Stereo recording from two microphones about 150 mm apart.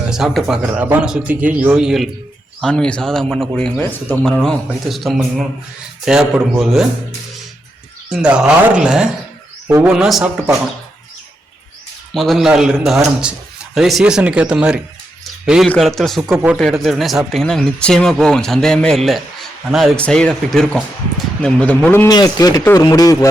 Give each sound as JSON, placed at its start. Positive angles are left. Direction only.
{"t": 0.1, "sound": "a man's voice", "side_deg": -5}
{"t": 8.1, "sound": "speech", "side_deg": -5}
{"t": 12.1, "sound": "speech", "side_deg": 0}
{"t": 15.2, "sound": "a sound", "side_deg": 0}
{"t": 15.8, "sound": "speech", "side_deg": 0}
{"t": 16.3, "sound": "a man's voice", "side_deg": -15}
{"t": 16.6, "sound": "speech", "side_deg": 0}
{"t": 22.1, "sound": "a man's voice", "side_deg": 25}